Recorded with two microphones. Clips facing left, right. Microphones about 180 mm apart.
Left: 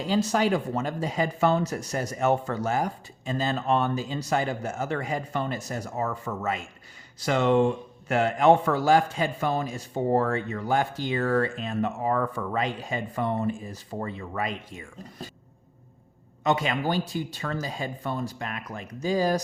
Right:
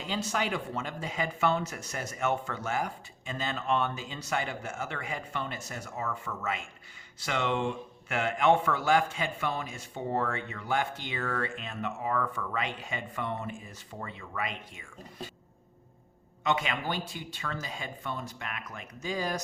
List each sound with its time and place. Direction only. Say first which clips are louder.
0.0 s a man's voice: left 8 dB; 35° left (ahead or behind)
16.4 s a man's voice: left 5 dB; 40° left (ahead or behind)